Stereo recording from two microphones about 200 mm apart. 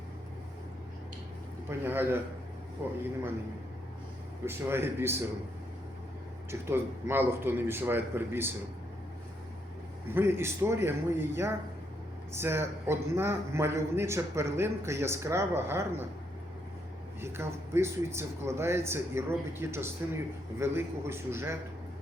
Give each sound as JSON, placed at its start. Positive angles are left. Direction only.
{"t": 1.8, "sound": "a man's voice", "side_deg": -10}
{"t": 4.4, "sound": "a man's voice", "side_deg": -10}
{"t": 6.5, "sound": "a man's voice", "side_deg": -10}
{"t": 10.2, "sound": "a man's voice", "side_deg": -10}
{"t": 17.2, "sound": "a man's voice", "side_deg": -10}